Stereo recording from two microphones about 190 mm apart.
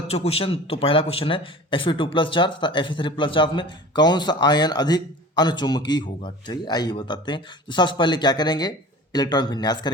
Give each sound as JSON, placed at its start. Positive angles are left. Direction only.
{"t": 0.1, "sound": "a man's voice", "side_deg": 30}